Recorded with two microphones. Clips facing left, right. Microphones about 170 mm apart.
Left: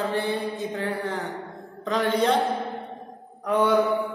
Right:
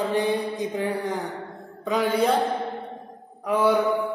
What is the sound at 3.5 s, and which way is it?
Speech, 5° right (ahead or behind).